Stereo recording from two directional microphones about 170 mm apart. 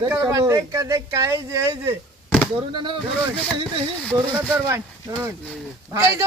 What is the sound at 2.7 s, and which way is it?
Speech, 30° right (ahead or behind).